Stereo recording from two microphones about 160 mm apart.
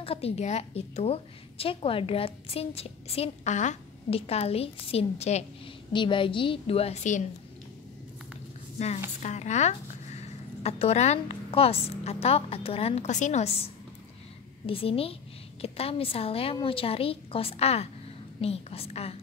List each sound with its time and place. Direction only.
0.0 s a woman's voice: 35° left (ahead or behind)
8.7 s a woman's voice: 45° left (ahead or behind)
14.7 s a woman's voice: 35° left (ahead or behind)